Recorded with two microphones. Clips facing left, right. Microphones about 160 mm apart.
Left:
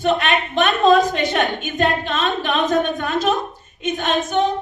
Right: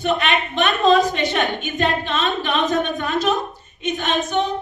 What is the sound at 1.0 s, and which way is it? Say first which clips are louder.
A woman's voice: left 1 dB; 45° left (ahead or behind).